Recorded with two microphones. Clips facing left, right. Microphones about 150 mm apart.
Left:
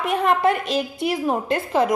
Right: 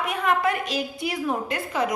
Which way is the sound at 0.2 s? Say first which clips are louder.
Left 3 dB; 25° left (ahead or behind).